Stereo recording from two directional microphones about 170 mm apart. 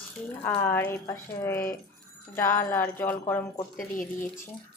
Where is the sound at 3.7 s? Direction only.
50° left (ahead or behind).